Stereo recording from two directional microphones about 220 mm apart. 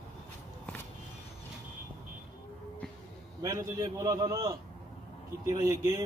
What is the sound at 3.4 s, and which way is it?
A man's voice, 15° right (ahead or behind).